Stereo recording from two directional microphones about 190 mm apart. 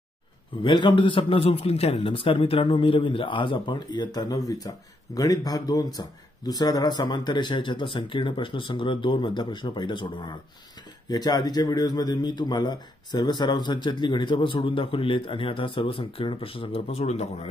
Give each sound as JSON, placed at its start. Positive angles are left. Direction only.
{"t": 0.6, "sound": "a man's voice", "side_deg": 25}